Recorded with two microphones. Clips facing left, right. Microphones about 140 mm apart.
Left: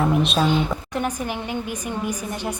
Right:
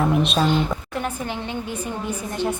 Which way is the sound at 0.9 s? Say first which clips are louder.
Left 2 dB; 15° left (ahead or behind).